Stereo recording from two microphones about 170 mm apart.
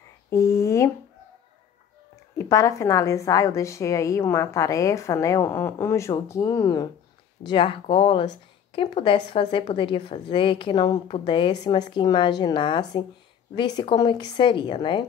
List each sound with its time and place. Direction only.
0.3 s a woman's voice: 15° left (ahead or behind)
2.3 s a woman's voice: 20° left (ahead or behind)
7.4 s speech: 30° left (ahead or behind)